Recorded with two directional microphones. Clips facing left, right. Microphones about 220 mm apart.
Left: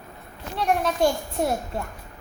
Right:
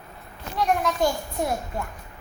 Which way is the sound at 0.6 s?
30° left (ahead or behind).